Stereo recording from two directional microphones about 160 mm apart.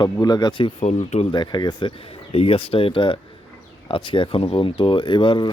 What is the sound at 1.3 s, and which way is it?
Speech, 30° left (ahead or behind).